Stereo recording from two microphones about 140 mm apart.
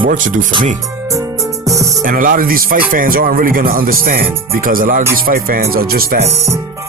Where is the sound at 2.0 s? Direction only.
75° right (ahead or behind).